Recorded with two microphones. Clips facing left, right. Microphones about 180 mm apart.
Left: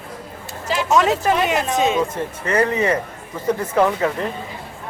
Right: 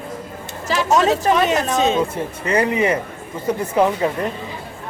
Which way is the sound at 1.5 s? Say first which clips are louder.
Right 1 dB; 40° right (ahead or behind).